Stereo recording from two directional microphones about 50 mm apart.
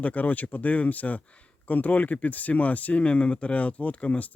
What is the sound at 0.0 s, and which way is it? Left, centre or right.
Speech, left.